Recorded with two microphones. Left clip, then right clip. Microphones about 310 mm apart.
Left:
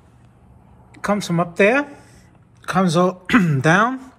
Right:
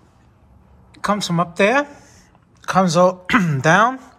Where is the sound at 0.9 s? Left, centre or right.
Centre.